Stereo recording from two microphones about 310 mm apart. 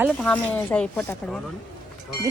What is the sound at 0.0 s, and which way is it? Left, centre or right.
Speech, centre.